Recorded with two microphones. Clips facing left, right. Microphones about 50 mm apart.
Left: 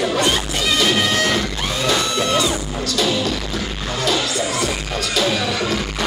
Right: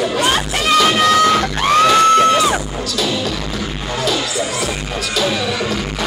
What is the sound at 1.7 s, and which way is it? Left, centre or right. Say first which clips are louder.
Music: right 12 dB; right.